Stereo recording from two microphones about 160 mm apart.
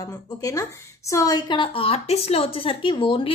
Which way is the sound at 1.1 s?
20° left (ahead or behind).